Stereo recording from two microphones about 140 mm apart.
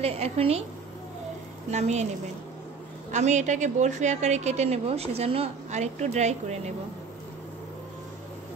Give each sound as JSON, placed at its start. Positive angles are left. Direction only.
{"t": 0.0, "sound": "a woman's voice", "side_deg": -45}
{"t": 1.7, "sound": "a woman's voice", "side_deg": -55}
{"t": 3.1, "sound": "a woman's voice", "side_deg": -55}